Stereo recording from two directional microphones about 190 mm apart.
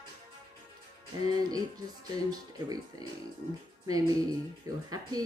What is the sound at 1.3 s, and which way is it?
Speech, 20° right (ahead or behind).